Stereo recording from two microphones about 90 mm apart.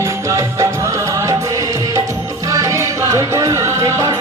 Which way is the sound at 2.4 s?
40° right (ahead or behind).